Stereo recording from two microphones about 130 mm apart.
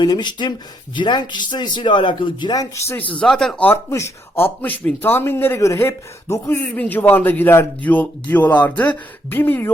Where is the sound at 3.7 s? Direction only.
20° left (ahead or behind).